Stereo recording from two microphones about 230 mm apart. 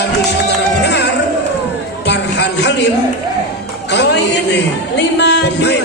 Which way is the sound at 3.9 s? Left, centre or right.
Left.